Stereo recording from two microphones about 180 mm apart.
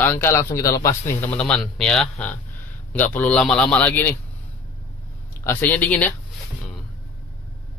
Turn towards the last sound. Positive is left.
turn(degrees=10)  # may be behind; listen again after turning